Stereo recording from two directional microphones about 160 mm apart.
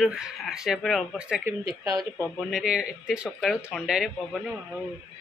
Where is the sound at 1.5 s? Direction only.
20° right (ahead or behind).